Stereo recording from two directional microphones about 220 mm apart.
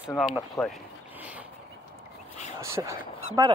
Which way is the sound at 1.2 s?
5° right (ahead or behind).